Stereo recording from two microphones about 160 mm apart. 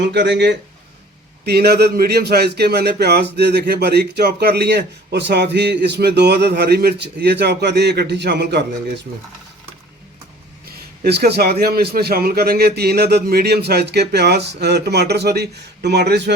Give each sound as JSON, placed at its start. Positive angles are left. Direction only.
{"t": 0.0, "sound": "a man's voice", "side_deg": -90}
{"t": 10.7, "sound": "a man's voice", "side_deg": -75}